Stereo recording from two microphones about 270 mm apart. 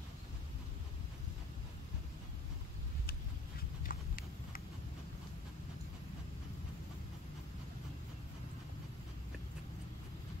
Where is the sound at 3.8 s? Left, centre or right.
Left.